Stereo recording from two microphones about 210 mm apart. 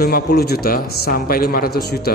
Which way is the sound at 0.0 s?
45° left (ahead or behind).